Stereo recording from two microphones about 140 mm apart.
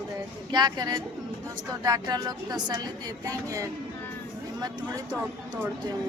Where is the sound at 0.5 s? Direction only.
30° right (ahead or behind).